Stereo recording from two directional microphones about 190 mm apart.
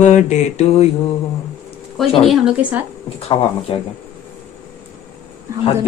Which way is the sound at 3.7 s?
25° left (ahead or behind).